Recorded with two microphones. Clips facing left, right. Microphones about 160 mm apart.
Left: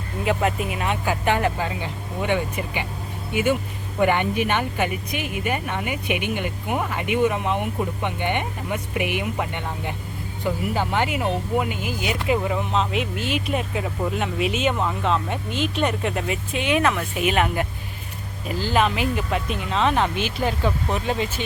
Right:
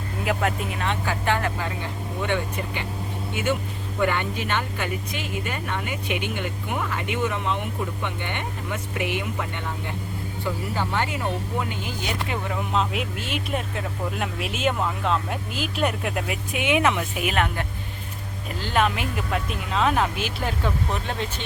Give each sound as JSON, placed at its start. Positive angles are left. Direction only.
{"t": 0.3, "sound": "speech", "side_deg": 5}
{"t": 4.0, "sound": "speech", "side_deg": 15}
{"t": 10.4, "sound": "speech", "side_deg": 15}
{"t": 16.5, "sound": "speech", "side_deg": -15}
{"t": 17.0, "sound": "speech", "side_deg": 0}